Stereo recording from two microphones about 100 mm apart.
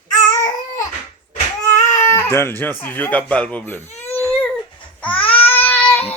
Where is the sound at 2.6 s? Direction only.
20° left (ahead or behind).